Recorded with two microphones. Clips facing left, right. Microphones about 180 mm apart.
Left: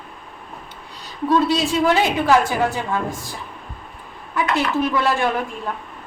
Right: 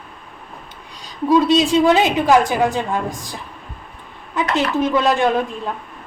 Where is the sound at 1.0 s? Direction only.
15° right (ahead or behind).